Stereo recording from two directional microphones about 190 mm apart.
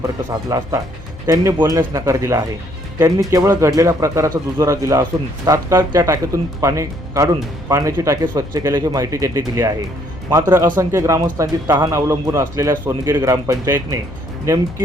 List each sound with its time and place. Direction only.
0.3 s speech: 15° right (ahead or behind)